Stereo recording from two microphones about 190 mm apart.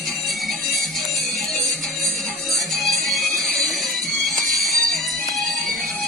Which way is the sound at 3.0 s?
Centre (ahead or behind).